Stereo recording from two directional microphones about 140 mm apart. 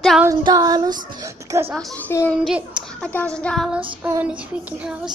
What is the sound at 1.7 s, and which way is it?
Speech, centre (ahead or behind).